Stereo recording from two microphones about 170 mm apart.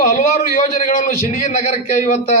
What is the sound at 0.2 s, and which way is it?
A man's voice, 45° left (ahead or behind).